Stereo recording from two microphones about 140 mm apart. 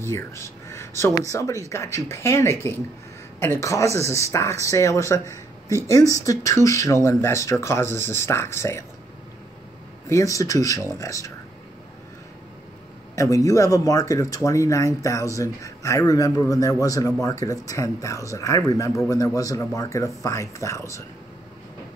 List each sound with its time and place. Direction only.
0.0 s speech: 20° left (ahead or behind)
10.0 s speech: 20° left (ahead or behind)
13.1 s speech: 20° left (ahead or behind)